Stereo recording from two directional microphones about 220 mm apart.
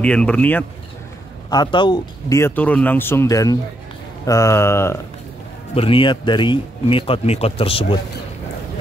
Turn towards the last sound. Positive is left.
turn(degrees=25)  # may be behind; listen again after turning